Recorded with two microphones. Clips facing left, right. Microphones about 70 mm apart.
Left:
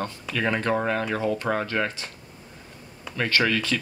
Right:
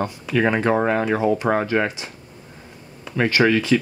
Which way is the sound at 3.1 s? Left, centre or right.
Centre.